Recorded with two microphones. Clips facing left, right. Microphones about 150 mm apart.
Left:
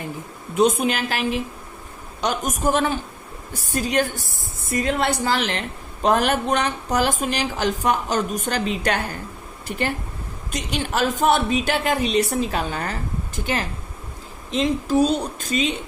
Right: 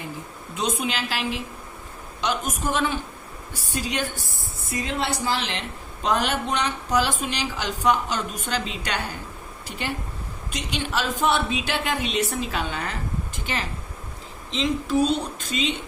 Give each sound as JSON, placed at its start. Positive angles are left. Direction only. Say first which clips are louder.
{"t": 0.5, "sound": "a woman's voice", "louder": "left 8 dB", "side_deg": 50}